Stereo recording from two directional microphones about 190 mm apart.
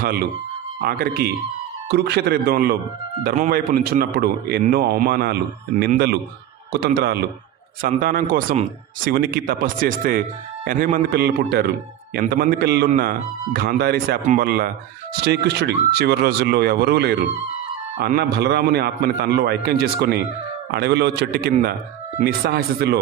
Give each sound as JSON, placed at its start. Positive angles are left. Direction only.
{"t": 0.7, "sound": "a man's voice", "side_deg": -50}